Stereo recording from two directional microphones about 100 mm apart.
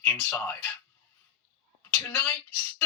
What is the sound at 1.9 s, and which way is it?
Speech, 20° left (ahead or behind).